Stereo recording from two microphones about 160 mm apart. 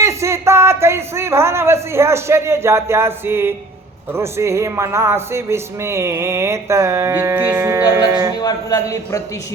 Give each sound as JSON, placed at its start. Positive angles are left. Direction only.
{"t": 0.0, "sound": "speech", "side_deg": -20}
{"t": 8.4, "sound": "a man's voice", "side_deg": 20}